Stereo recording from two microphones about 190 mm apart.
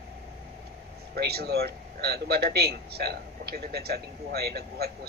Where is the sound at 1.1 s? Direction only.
55° right (ahead or behind).